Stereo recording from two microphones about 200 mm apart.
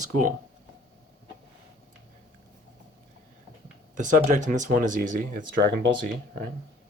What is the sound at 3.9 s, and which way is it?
Speech, 40° right (ahead or behind).